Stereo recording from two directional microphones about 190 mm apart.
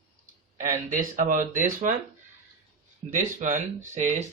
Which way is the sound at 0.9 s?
45° right (ahead or behind).